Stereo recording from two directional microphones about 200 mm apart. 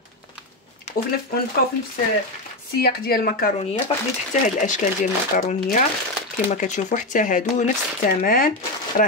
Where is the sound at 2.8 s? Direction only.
50° left (ahead or behind).